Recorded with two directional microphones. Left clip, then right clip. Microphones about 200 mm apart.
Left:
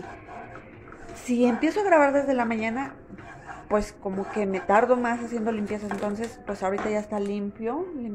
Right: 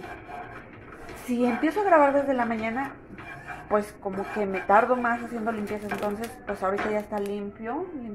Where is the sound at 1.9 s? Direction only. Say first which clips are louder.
Even; 25° left (ahead or behind).